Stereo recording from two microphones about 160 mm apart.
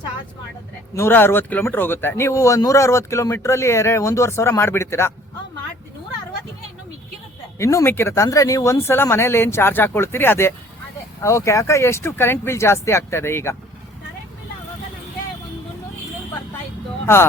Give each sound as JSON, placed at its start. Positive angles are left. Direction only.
{"t": 0.9, "sound": "speech", "side_deg": 15}
{"t": 7.6, "sound": "speech", "side_deg": 20}